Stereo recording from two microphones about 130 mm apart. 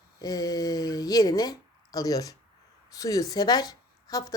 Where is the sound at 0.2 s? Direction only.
30° left (ahead or behind).